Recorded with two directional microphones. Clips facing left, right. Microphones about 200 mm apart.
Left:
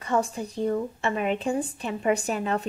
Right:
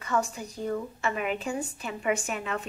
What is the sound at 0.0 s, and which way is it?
Speech, 30° left (ahead or behind).